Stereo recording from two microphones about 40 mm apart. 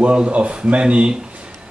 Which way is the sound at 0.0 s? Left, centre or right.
Right.